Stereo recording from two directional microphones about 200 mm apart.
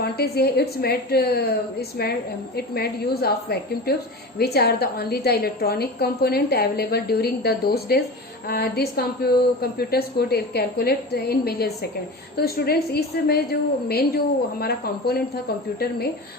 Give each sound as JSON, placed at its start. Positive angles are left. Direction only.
{"t": 0.0, "sound": "a woman's voice", "side_deg": 50}
{"t": 2.6, "sound": "a woman's voice", "side_deg": 50}